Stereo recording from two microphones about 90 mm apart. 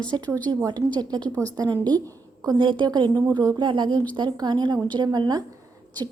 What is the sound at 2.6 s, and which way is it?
Speech, 65° right (ahead or behind).